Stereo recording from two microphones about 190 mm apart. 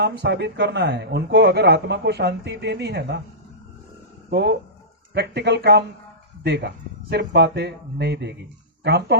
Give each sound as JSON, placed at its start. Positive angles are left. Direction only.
{"t": 0.0, "sound": "a man's voice", "side_deg": -60}
{"t": 4.3, "sound": "a man's voice", "side_deg": -60}